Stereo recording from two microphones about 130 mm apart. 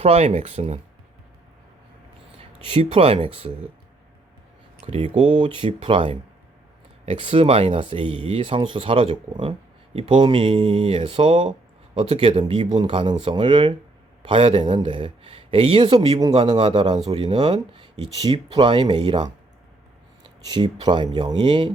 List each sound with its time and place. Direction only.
0.0 s speech: 50° right (ahead or behind)
2.4 s speech: 45° right (ahead or behind)
4.9 s speech: 50° right (ahead or behind)
20.4 s speech: 35° right (ahead or behind)